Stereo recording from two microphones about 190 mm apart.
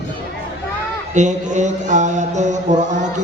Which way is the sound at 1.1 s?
40° right (ahead or behind).